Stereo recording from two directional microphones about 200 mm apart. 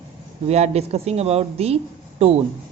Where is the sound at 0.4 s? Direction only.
30° right (ahead or behind).